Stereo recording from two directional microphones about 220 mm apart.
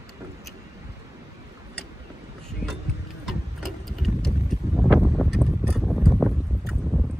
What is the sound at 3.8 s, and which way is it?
Vehicle, centre (ahead or behind).